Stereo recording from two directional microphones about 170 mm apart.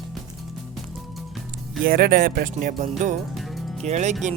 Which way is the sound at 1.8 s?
60° right (ahead or behind).